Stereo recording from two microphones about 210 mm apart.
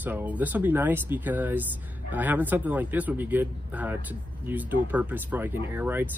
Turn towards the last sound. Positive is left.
turn(degrees=-10)  # may be behind; listen again after turning